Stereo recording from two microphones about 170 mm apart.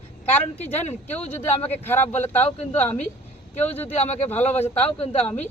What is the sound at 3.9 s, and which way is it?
Speech, 40° left (ahead or behind).